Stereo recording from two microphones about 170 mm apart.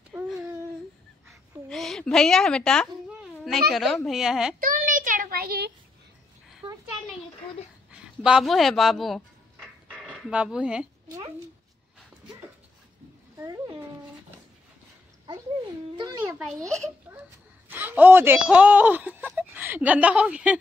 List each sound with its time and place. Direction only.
0.1 s a sound: 5° right (ahead or behind)
1.7 s a sound: centre (ahead or behind)
3.7 s a woman's voice: centre (ahead or behind)
4.6 s child singing: 55° right (ahead or behind)
7.9 s speech: 5° right (ahead or behind)
13.4 s cat: 20° right (ahead or behind)
16.0 s a sound: 20° right (ahead or behind)
16.3 s a woman's voice: centre (ahead or behind)
17.1 s wail: 15° right (ahead or behind)
17.6 s speech: 10° right (ahead or behind)